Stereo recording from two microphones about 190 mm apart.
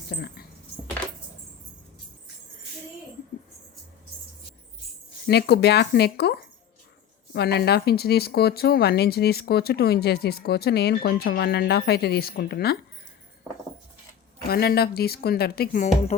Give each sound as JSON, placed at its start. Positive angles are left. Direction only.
{"t": 0.1, "sound": "speech", "side_deg": 55}
{"t": 5.2, "sound": "speech", "side_deg": 60}
{"t": 14.4, "sound": "speech", "side_deg": 55}